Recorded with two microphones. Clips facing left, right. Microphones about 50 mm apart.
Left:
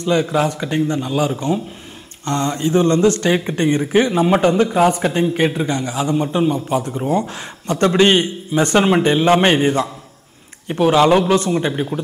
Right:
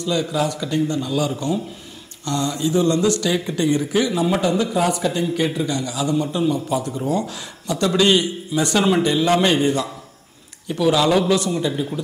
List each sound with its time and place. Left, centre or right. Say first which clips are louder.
0.0 s speech: left 4 dB; left